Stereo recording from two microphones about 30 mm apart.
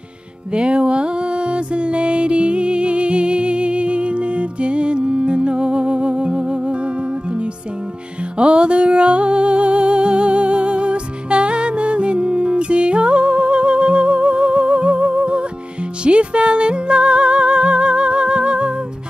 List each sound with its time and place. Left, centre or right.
0.5 s music: right
8.4 s music: right